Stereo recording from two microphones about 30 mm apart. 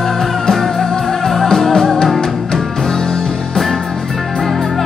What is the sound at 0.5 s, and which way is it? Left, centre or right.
Music, centre.